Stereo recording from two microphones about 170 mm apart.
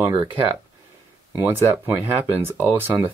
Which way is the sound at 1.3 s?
15° right (ahead or behind).